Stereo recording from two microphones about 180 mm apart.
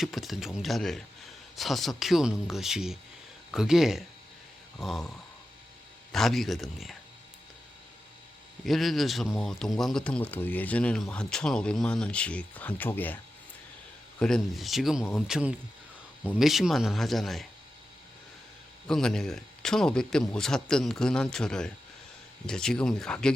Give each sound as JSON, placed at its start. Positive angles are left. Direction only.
{"t": 0.0, "sound": "a man's voice", "side_deg": 0}
{"t": 8.6, "sound": "a man's voice", "side_deg": 0}
{"t": 14.2, "sound": "a man's voice", "side_deg": 5}
{"t": 18.9, "sound": "a man's voice", "side_deg": 5}